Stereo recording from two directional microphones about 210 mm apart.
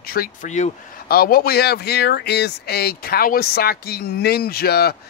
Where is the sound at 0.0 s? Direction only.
45° left (ahead or behind).